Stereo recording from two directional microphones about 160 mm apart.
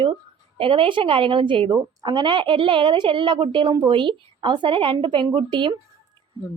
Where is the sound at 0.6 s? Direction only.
35° right (ahead or behind).